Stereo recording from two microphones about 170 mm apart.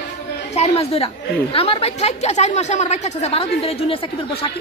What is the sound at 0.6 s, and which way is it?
A woman's voice, 35° left (ahead or behind).